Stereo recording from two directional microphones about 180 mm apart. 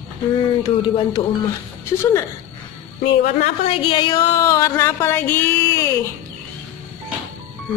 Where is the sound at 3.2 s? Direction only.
40° left (ahead or behind).